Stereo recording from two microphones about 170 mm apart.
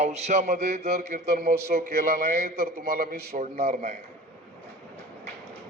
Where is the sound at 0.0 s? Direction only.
40° right (ahead or behind).